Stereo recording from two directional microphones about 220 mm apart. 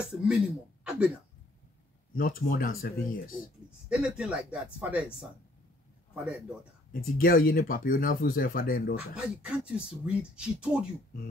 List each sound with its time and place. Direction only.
0.0 s speech: 5° right (ahead or behind)
0.8 s a sound: 5° right (ahead or behind)
2.1 s speech: 40° left (ahead or behind)
3.9 s speech: 5° right (ahead or behind)
7.2 s speech: 40° left (ahead or behind)
9.1 s speech: 5° right (ahead or behind)